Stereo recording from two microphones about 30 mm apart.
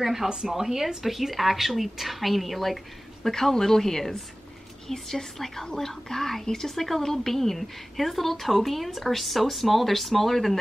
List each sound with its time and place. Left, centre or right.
0.0 s a woman's voice: centre
3.3 s a woman's voice: centre